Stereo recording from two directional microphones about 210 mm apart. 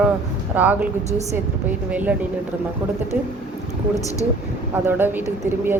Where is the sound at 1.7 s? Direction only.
10° right (ahead or behind).